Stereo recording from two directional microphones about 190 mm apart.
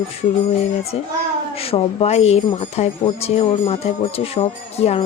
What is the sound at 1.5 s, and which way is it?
Speech, 30° left (ahead or behind).